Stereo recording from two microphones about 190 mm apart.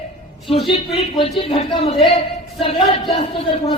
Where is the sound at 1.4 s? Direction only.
30° left (ahead or behind).